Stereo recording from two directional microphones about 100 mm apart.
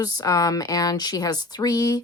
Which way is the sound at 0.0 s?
35° left (ahead or behind).